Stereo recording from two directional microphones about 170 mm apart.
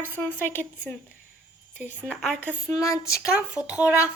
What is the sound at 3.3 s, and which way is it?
Speech, 5° right (ahead or behind).